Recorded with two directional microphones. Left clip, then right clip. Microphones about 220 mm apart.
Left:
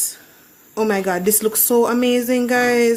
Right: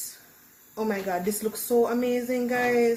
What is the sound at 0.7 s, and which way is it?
A woman's voice, 40° left (ahead or behind).